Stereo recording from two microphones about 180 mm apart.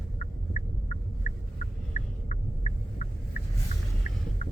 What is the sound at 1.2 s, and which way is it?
Fowl, 45° left (ahead or behind).